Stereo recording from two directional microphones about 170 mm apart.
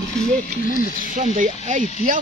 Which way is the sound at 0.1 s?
45° left (ahead or behind).